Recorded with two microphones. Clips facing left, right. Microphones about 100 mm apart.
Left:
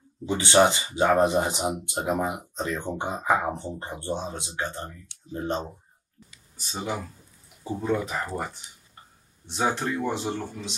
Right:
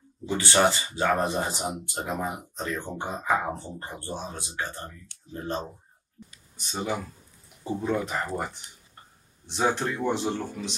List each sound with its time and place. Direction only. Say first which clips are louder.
0.3 s speech: left 3 dB; 20° left (ahead or behind)
6.5 s speech: right 1 dB; centre (ahead or behind)